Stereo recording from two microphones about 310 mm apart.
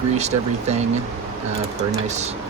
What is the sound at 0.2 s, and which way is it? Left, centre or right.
Speech, right.